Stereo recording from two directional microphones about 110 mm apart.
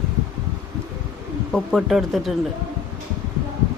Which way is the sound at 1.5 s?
Centre (ahead or behind).